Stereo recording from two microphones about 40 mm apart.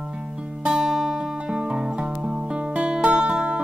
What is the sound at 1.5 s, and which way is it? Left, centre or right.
Music, right.